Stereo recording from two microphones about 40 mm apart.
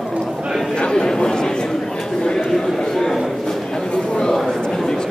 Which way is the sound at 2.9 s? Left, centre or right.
Centre.